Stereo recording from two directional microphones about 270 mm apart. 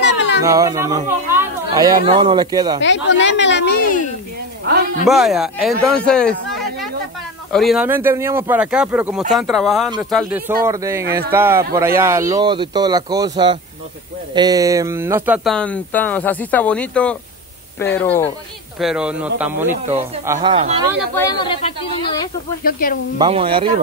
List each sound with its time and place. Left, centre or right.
0.4 s speech: centre
2.8 s a woman's voice: left
5.0 s speech: centre
7.5 s speech: centre
10.6 s speech: centre
20.3 s speech: right
21.1 s speech: centre
22.6 s a woman's voice: left
23.1 s speech: centre